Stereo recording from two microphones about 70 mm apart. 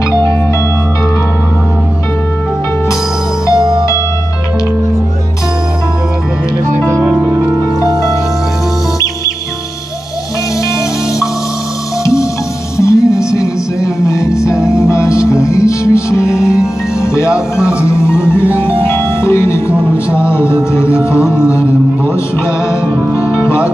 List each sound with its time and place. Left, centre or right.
3.5 s music: right
12.0 s music: left
17.3 s music: centre
17.8 s music: left
19.7 s music: centre
20.2 s music: left